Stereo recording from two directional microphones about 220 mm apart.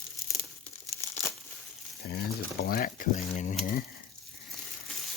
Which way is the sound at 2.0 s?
45° left (ahead or behind).